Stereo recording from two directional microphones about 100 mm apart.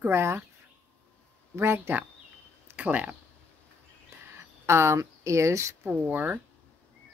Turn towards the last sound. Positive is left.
turn(degrees=-15)  # may be behind; listen again after turning